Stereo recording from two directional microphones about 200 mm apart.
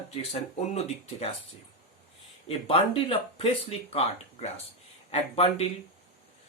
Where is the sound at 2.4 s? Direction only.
30° left (ahead or behind).